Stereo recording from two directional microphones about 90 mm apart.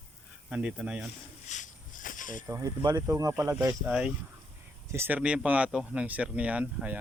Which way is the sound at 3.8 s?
15° right (ahead or behind).